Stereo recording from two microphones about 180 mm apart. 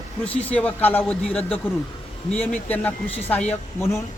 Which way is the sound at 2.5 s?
10° left (ahead or behind).